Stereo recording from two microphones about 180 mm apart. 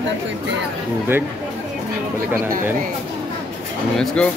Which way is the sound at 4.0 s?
5° left (ahead or behind).